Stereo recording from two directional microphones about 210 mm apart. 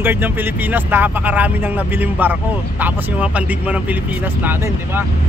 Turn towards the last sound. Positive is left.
turn(degrees=-10)  # may be behind; listen again after turning